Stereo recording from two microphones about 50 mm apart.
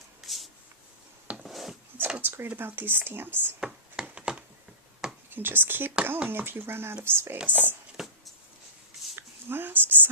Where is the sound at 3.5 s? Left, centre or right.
Centre.